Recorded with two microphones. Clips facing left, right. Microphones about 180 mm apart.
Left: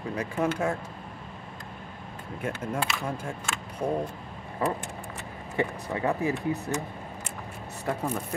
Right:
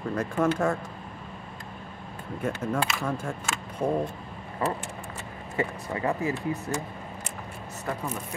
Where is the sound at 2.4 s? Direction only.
10° left (ahead or behind).